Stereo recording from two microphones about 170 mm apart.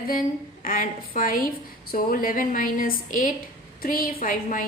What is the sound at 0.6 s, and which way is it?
A woman's voice, 55° left (ahead or behind).